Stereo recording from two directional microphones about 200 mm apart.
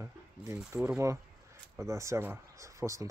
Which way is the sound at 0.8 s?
15° right (ahead or behind).